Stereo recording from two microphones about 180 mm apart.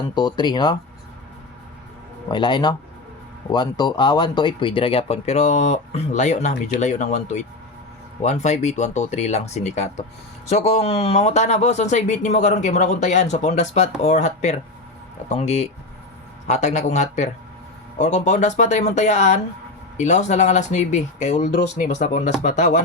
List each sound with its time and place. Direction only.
0.1 s speech: 25° left (ahead or behind)
2.3 s speech: 25° left (ahead or behind); by 22.8 s 45° left (ahead or behind)